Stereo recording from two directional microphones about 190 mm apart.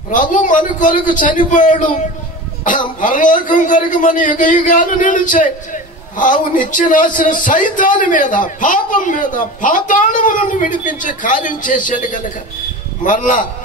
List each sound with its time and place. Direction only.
0.1 s a man's voice: 45° left (ahead or behind)